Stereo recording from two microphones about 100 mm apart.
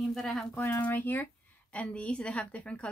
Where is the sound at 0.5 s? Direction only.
15° left (ahead or behind).